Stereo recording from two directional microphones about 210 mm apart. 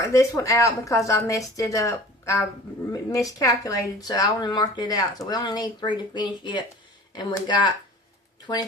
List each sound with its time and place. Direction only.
0.0 s speech: 15° left (ahead or behind)